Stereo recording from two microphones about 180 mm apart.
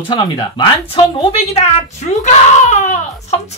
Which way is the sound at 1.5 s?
40° left (ahead or behind).